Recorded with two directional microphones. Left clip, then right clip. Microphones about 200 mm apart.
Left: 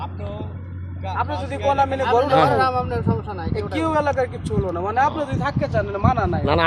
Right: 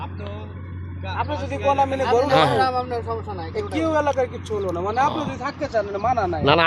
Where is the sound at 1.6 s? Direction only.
10° left (ahead or behind).